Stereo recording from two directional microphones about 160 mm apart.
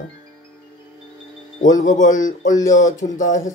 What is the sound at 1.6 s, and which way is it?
Speech, 50° left (ahead or behind).